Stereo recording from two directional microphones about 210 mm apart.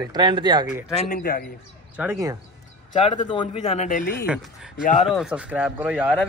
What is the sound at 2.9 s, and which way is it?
Speech, 25° left (ahead or behind).